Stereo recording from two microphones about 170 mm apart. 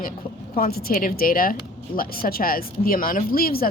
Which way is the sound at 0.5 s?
60° left (ahead or behind).